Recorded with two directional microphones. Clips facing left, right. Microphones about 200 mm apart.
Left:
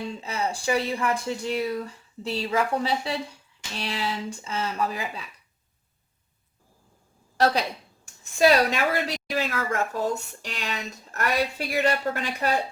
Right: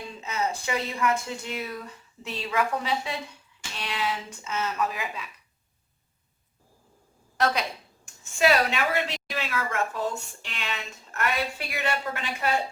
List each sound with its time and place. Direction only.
0.2 s a woman's voice: 30° left (ahead or behind)
7.3 s a woman's voice: 35° left (ahead or behind)